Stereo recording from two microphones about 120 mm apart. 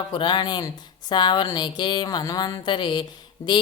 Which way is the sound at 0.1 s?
40° left (ahead or behind).